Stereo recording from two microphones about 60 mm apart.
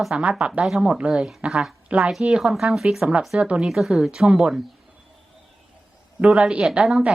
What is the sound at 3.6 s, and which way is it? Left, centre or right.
Speech, centre.